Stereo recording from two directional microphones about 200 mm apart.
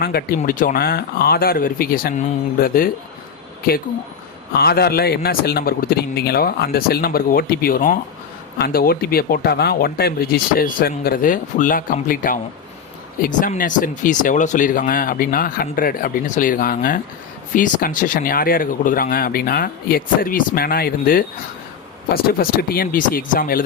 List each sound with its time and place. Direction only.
0.0 s speech: 50° left (ahead or behind)
4.5 s speech: 50° left (ahead or behind)